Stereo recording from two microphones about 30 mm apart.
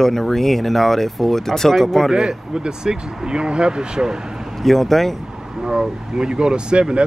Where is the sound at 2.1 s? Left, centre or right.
Right.